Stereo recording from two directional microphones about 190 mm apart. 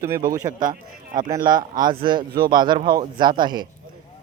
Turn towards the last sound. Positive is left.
turn(degrees=-20)  # may be behind; listen again after turning